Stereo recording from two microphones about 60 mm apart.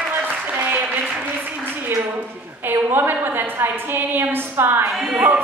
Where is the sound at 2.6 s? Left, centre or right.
Right.